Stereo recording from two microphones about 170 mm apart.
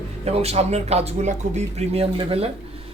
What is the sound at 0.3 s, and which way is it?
Speech, 35° right (ahead or behind).